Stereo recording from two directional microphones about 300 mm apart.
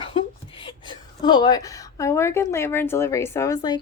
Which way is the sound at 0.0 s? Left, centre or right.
Centre.